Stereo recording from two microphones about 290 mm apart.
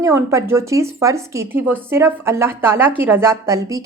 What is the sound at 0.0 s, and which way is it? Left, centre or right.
A woman's voice, centre.